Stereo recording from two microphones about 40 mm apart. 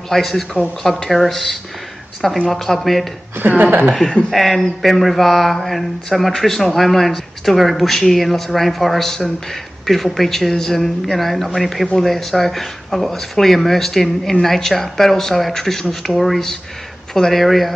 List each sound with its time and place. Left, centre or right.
0.1 s speech: centre
3.3 s speech: right
4.3 s speech: centre